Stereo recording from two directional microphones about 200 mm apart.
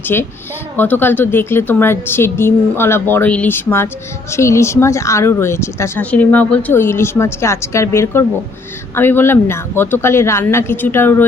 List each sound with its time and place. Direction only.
0.0 s speech: 10° left (ahead or behind)